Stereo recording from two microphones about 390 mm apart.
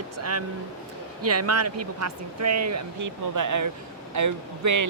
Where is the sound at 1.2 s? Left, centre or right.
Right.